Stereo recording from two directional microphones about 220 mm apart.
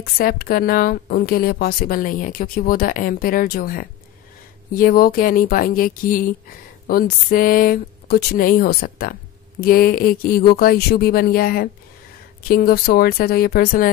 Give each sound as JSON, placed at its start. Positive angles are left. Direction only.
{"t": 0.0, "sound": "speech", "side_deg": 45}